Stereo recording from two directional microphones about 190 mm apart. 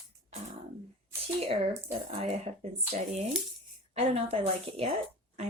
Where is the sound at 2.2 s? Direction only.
30° right (ahead or behind).